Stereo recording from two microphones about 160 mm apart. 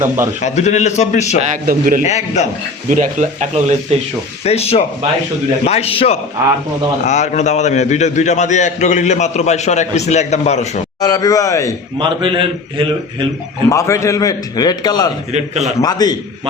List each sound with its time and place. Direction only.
0.4 s a man's voice: 45° left (ahead or behind)
1.6 s a man's voice: 60° right (ahead or behind)
2.0 s a man's voice: 45° left (ahead or behind)
2.9 s speech: 50° right (ahead or behind)
4.4 s a man's voice: 40° left (ahead or behind)
11.0 s a man's voice: 20° left (ahead or behind)
11.9 s a man's voice: 30° right (ahead or behind)
13.7 s a man's voice: 20° left (ahead or behind)
15.3 s speech: 45° right (ahead or behind)
15.8 s a man's voice: 25° left (ahead or behind)